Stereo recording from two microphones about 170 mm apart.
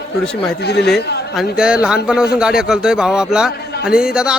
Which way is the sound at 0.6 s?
75° left (ahead or behind).